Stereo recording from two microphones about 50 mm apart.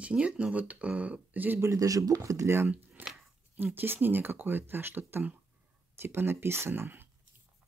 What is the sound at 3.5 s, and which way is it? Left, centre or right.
Speech, right.